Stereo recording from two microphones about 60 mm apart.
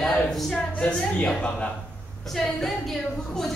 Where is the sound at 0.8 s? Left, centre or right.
Centre.